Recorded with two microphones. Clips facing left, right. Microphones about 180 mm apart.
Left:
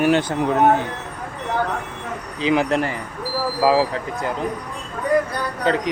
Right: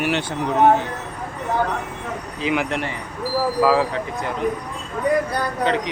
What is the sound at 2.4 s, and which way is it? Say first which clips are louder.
Speech: left 4 dB; 30° left (ahead or behind).